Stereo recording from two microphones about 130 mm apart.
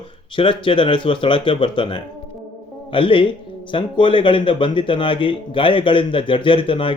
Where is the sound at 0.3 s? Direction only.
40° left (ahead or behind).